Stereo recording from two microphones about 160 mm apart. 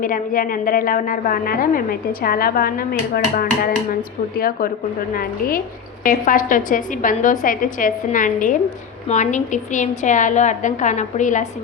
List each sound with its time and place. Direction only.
0.0 s a woman's voice: 60° left (ahead or behind)